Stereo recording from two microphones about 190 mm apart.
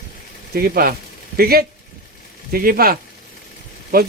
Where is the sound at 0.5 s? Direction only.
50° right (ahead or behind).